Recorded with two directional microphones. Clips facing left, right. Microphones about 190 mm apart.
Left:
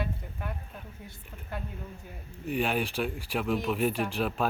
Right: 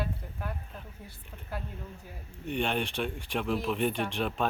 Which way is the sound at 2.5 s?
5° left (ahead or behind).